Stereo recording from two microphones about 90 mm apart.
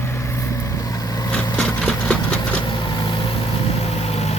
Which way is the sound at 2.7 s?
60° left (ahead or behind).